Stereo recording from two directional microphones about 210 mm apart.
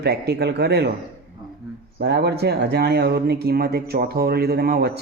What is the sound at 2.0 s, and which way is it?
A man's voice, 50° right (ahead or behind).